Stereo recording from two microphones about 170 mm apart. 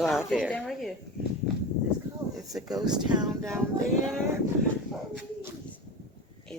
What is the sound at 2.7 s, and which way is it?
Speech, 25° right (ahead or behind).